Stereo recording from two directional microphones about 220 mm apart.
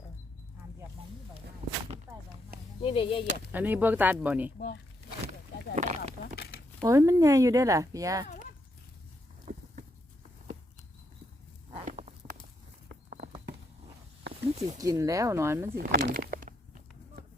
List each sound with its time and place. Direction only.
2.8 s chop: 25° left (ahead or behind)
3.5 s speech: 10° right (ahead or behind)
5.7 s a sound: 30° right (ahead or behind)
6.8 s speech: 15° right (ahead or behind)
11.9 s walk: 30° right (ahead or behind)
14.8 s speech: 15° right (ahead or behind)
15.8 s walk: 40° right (ahead or behind)